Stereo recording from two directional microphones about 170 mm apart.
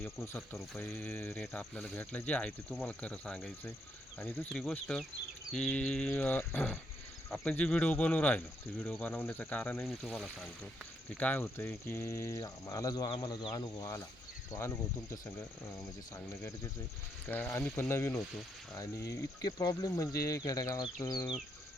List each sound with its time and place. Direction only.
0.0 s speech: 15° left (ahead or behind)
9.8 s speech: centre (ahead or behind); by 15.4 s 15° left (ahead or behind)
17.2 s speech: 10° left (ahead or behind)